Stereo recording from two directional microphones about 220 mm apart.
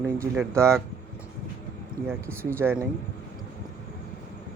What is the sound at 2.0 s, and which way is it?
Speech, 10° right (ahead or behind).